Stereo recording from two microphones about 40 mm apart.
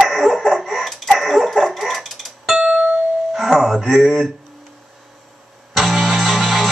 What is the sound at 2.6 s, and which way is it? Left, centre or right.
Music, right.